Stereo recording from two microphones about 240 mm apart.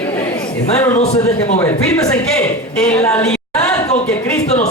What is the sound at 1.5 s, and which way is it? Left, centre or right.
Speech, centre.